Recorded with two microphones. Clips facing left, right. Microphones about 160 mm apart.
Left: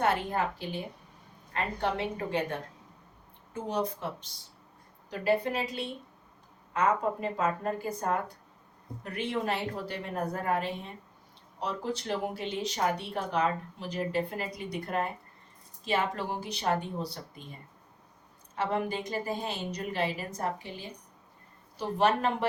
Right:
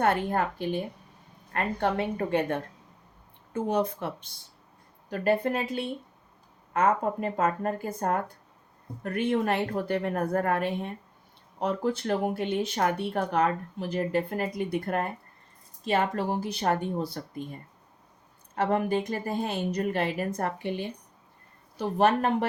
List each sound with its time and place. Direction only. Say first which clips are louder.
0.0 s a woman's voice: right 3 dB; 50° right (ahead or behind)
21.8 s speech: right 3 dB; 50° right (ahead or behind)